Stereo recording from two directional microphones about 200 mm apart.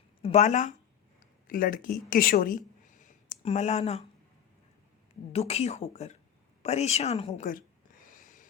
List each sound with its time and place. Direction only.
0.2 s speech: 35° left (ahead or behind)
5.3 s speech: 30° left (ahead or behind)
8.1 s a sound: 40° left (ahead or behind)